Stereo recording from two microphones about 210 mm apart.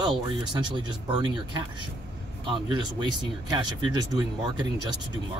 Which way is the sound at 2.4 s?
25° right (ahead or behind).